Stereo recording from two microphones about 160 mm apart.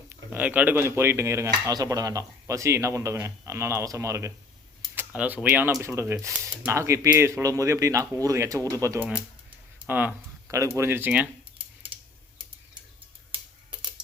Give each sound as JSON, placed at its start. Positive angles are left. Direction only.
{"t": 0.1, "sound": "speech", "side_deg": -10}
{"t": 9.7, "sound": "a sound", "side_deg": -10}
{"t": 10.8, "sound": "speech", "side_deg": -15}